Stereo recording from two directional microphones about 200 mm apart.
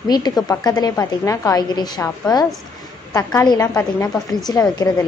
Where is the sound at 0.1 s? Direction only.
20° left (ahead or behind).